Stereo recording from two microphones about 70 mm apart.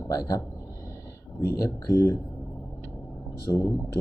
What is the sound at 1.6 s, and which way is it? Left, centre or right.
Speech, left.